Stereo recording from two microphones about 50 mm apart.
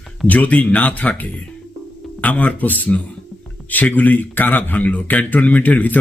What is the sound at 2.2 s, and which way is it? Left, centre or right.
A man's voice, left.